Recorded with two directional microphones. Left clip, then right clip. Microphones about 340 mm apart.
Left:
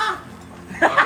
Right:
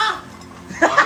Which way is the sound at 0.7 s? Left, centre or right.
Right.